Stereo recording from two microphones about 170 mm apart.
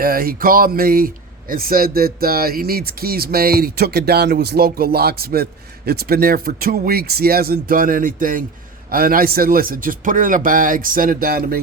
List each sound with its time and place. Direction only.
0.0 s speech: 60° right (ahead or behind)